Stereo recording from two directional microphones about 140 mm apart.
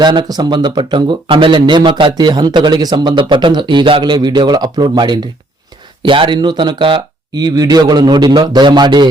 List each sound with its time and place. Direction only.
0.0 s speech: 30° right (ahead or behind)